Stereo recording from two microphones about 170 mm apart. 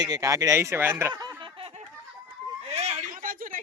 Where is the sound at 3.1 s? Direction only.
55° right (ahead or behind).